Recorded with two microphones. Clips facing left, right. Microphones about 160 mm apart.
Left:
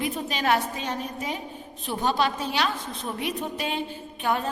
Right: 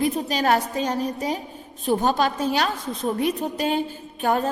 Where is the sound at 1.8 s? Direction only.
45° right (ahead or behind).